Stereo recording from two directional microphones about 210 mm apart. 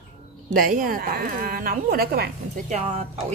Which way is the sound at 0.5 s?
40° right (ahead or behind).